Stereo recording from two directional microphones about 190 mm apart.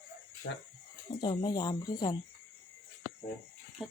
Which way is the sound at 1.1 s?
25° left (ahead or behind).